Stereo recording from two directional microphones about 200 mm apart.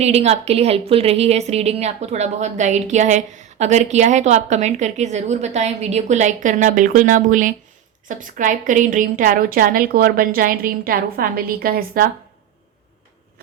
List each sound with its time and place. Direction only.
0.0 s a woman's voice: 30° right (ahead or behind)